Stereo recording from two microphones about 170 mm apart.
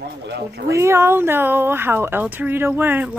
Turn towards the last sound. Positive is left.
turn(degrees=-10)  # may be behind; listen again after turning